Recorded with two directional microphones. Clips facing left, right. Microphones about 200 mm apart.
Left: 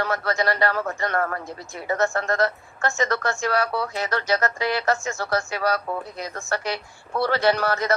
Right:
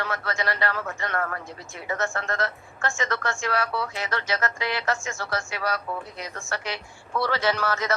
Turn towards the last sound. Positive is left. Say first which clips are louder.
# left 4 dB
turn(degrees=35)  # may be behind; listen again after turning